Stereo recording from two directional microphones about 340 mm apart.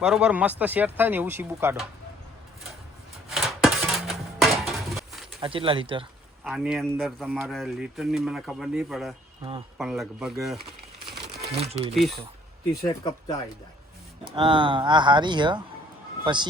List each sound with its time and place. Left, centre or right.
0.0 s speech: centre
3.2 s a sound: centre
5.4 s speech: centre
6.4 s speech: centre
11.1 s crumpling: centre
12.9 s speech: centre
14.3 s speech: centre